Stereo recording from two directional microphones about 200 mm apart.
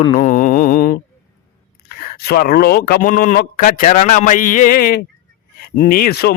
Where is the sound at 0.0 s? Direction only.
30° left (ahead or behind); by 0.9 s 45° left (ahead or behind).